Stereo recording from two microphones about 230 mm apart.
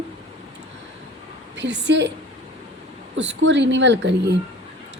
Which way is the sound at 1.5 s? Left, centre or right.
Right.